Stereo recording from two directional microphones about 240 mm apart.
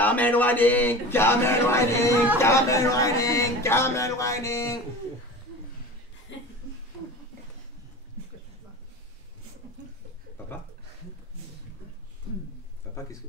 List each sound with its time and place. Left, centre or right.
0.0 s speech: centre
6.3 s chuckle: left